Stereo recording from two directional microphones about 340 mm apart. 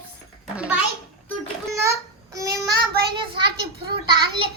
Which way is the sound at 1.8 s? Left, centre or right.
Centre.